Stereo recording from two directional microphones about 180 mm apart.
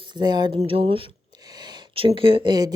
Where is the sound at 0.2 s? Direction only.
25° right (ahead or behind).